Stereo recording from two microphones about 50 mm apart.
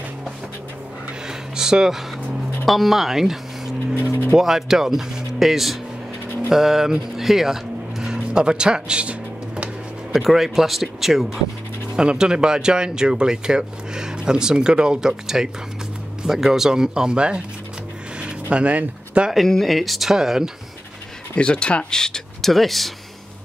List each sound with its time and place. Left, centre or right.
1.2 s a sound: centre
2.6 s speech: centre
10.1 s speech: centre
11.9 s speech: centre
18.2 s a sound: right
19.3 s speech: centre
21.4 s speech: left
22.5 s speech: centre